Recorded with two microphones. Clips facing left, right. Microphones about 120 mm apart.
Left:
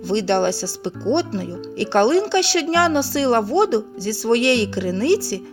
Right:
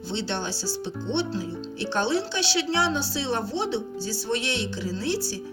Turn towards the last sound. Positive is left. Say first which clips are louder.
# left 10 dB
turn(degrees=75)  # may be behind; listen again after turning